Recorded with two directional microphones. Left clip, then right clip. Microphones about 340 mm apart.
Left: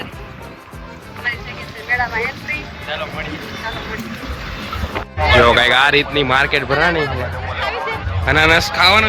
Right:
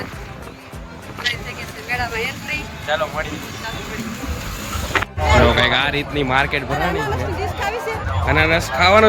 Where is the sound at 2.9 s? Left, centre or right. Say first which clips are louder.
Right 4 dB; centre.